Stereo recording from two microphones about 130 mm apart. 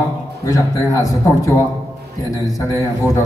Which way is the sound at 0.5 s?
25° left (ahead or behind).